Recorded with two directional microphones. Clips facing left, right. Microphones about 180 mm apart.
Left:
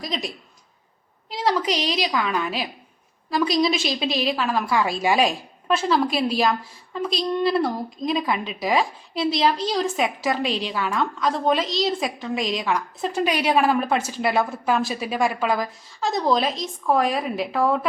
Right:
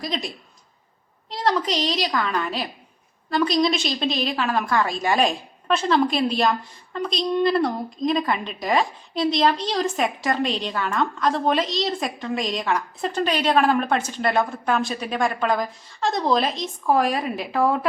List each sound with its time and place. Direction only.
0.0 s a woman's voice: centre (ahead or behind)
1.3 s a woman's voice: 5° left (ahead or behind)